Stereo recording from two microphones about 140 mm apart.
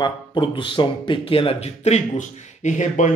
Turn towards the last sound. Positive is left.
turn(degrees=60)  # may be behind; listen again after turning